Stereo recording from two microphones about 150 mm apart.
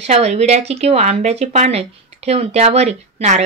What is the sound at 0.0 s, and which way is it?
Speech, 45° right (ahead or behind).